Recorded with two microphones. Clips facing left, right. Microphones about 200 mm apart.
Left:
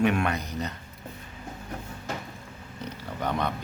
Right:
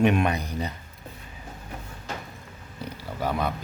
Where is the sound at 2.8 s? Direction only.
10° right (ahead or behind).